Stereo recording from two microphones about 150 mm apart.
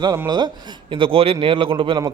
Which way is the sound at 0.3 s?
30° right (ahead or behind).